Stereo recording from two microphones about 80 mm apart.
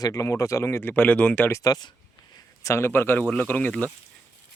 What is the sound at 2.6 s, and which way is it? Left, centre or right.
Speech, left.